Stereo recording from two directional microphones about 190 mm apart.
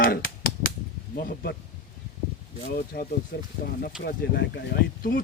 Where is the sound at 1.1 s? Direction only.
50° left (ahead or behind).